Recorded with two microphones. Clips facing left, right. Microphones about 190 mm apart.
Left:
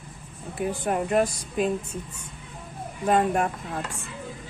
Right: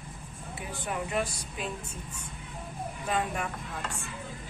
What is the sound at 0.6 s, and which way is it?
Speech, 45° left (ahead or behind).